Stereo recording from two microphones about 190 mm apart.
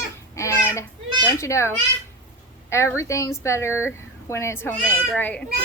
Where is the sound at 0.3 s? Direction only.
15° left (ahead or behind).